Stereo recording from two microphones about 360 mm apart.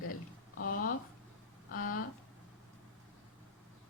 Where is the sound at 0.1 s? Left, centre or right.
Left.